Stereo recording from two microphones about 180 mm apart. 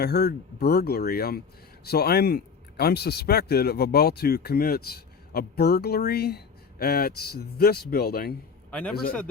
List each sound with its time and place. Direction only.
0.0 s speech: 65° left (ahead or behind)
8.7 s a man's voice: 5° left (ahead or behind)